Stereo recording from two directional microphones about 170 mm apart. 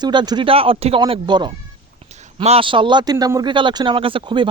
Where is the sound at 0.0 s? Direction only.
25° right (ahead or behind).